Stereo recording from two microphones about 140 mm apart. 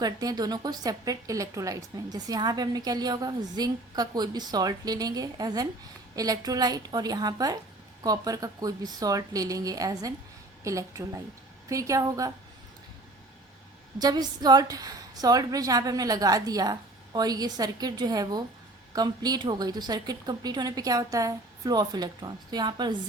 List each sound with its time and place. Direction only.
0.0 s a woman's voice: 30° right (ahead or behind)
14.0 s a woman's voice: 30° right (ahead or behind)